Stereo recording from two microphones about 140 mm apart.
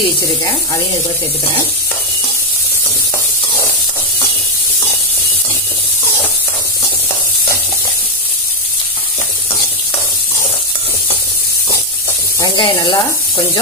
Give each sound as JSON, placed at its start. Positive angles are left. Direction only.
{"t": 12.4, "sound": "speech", "side_deg": 30}